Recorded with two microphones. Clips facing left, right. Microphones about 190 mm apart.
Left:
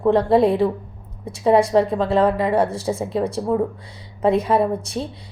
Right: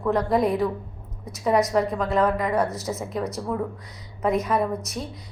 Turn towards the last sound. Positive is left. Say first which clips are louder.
# left 5 dB
turn(degrees=30)  # may be behind; listen again after turning